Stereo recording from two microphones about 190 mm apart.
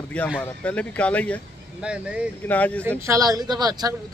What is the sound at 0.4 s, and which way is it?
A man's voice, 5° left (ahead or behind).